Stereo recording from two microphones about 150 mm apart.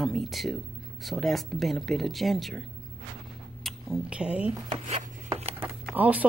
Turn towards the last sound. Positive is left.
turn(degrees=-10)  # may be behind; listen again after turning